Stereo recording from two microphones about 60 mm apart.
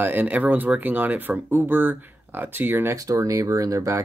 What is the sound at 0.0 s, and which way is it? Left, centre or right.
Speech, right.